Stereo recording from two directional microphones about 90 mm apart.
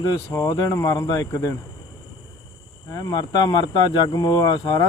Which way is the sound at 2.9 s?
45° left (ahead or behind).